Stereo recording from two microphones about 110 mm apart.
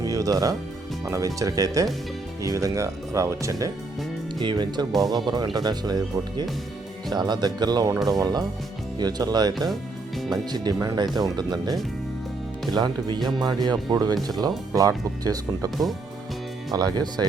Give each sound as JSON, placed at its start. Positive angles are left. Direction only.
{"t": 0.0, "sound": "music", "side_deg": -30}
{"t": 1.0, "sound": "speech", "side_deg": -30}
{"t": 4.4, "sound": "speech", "side_deg": -40}
{"t": 7.1, "sound": "speech", "side_deg": -40}
{"t": 16.7, "sound": "speech", "side_deg": -40}